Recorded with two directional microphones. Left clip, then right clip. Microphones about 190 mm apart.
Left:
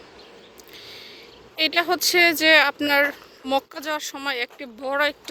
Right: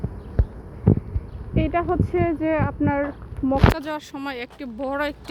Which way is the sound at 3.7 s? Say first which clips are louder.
Left 1 dB; centre (ahead or behind).